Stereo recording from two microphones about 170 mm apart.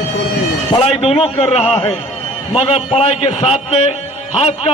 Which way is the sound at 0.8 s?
35° left (ahead or behind).